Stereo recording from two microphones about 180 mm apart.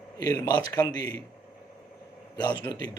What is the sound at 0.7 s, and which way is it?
Speech, 25° left (ahead or behind).